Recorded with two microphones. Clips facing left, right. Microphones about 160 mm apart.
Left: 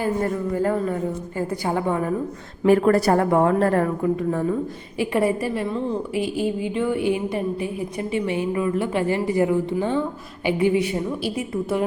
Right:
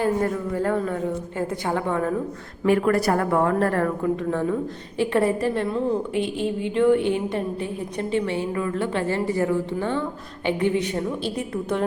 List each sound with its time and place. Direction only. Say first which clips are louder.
0.0 s a man's voice: even; 5° left (ahead or behind)
2.6 s a woman's voice: left 3 dB; 35° left (ahead or behind)
4.2 s a woman's voice: left 1 dB; 10° left (ahead or behind)
5.6 s a woman's voice: right 1 dB; 5° right (ahead or behind)